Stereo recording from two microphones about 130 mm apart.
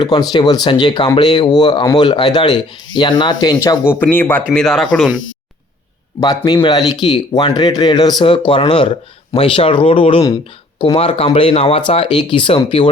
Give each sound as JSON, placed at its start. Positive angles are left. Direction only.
{"t": 0.0, "sound": "speech", "side_deg": 35}
{"t": 4.0, "sound": "speech", "side_deg": 15}
{"t": 4.5, "sound": "speech", "side_deg": 0}
{"t": 6.1, "sound": "speech", "side_deg": 30}